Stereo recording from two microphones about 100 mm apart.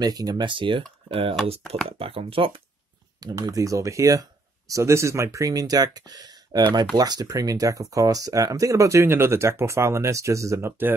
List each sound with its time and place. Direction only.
0.0 s speech: 40° right (ahead or behind); by 2.6 s 65° right (ahead or behind)
3.2 s speech: 40° right (ahead or behind); by 11.0 s 25° right (ahead or behind)